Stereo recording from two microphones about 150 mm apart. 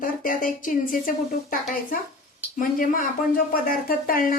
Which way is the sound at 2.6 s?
65° left (ahead or behind).